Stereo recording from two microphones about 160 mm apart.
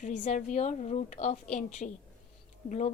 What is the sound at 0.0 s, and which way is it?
A woman's voice, 50° left (ahead or behind).